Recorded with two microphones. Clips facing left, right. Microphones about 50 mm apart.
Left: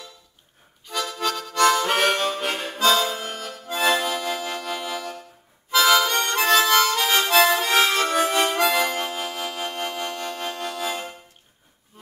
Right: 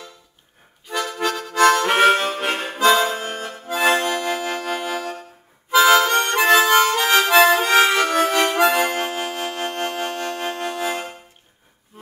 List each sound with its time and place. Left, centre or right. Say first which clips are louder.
0.9 s music: right 3 dB; right
1.5 s music: right 4 dB; right
1.8 s harmonica: right 5 dB; right
2.8 s music: right 4 dB; right
3.1 s accordion: right 4 dB; right
3.8 s music: right 3 dB; right
5.7 s harmonica: right 4 dB; right
7.2 s music: right 4 dB; right
8.0 s harmonica: right 3 dB; right
8.6 s music: right 3 dB; right